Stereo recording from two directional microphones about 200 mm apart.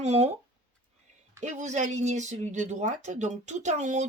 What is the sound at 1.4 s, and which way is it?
Speech, 35° right (ahead or behind).